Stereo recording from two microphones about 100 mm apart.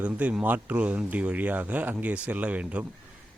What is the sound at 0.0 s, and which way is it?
Speech, 15° right (ahead or behind).